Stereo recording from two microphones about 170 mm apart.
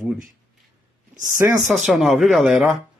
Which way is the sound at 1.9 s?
Centre (ahead or behind).